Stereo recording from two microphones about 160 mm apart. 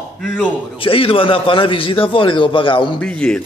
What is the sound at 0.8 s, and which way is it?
A man's voice, 35° left (ahead or behind).